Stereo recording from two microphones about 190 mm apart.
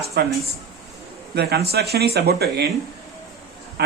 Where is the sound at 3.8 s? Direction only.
60° right (ahead or behind).